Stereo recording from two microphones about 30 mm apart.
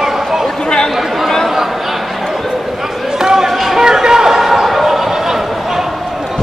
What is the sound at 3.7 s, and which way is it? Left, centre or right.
Chatter, centre.